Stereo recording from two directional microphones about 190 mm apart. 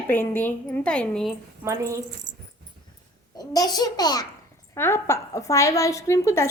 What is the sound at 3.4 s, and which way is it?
A child's voice, 20° left (ahead or behind).